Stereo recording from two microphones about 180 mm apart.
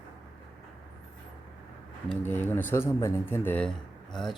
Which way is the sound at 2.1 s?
10° left (ahead or behind).